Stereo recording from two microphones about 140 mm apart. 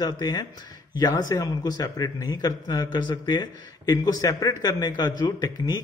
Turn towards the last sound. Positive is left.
turn(degrees=30)  # may be behind; listen again after turning